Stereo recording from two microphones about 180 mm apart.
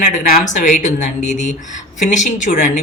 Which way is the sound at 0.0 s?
50° left (ahead or behind).